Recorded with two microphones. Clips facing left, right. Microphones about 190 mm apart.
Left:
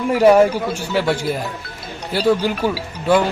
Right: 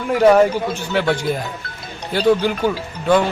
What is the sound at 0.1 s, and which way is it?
Speech, 10° left (ahead or behind).